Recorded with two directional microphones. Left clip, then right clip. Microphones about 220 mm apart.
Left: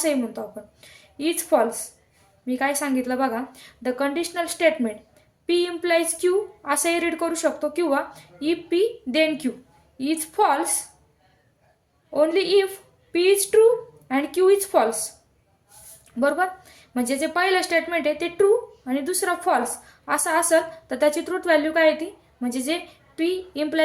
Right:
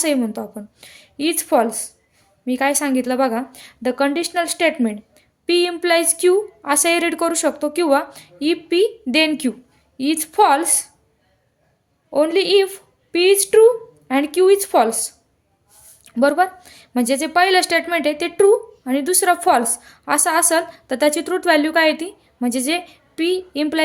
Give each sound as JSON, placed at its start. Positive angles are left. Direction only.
{"t": 0.0, "sound": "a woman's voice", "side_deg": -45}
{"t": 12.1, "sound": "a woman's voice", "side_deg": -40}
{"t": 16.0, "sound": "a woman's voice", "side_deg": -40}